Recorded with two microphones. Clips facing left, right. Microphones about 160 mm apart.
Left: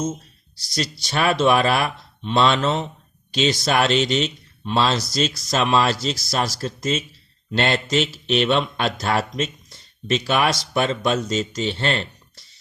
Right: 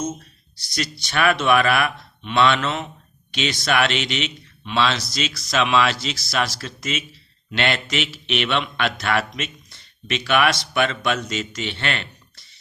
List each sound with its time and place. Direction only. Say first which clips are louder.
0.7 s speech: left 1 dB; 35° left (ahead or behind)